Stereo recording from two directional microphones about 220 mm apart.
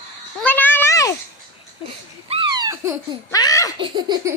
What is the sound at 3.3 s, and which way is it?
Speech, 15° left (ahead or behind).